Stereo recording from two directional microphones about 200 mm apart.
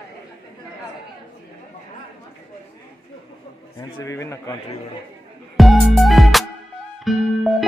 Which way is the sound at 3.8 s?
15° left (ahead or behind).